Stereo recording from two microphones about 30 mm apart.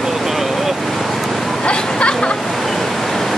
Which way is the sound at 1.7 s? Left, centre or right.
Left.